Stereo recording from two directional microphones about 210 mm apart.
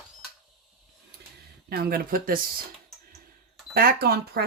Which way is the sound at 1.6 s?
45° right (ahead or behind).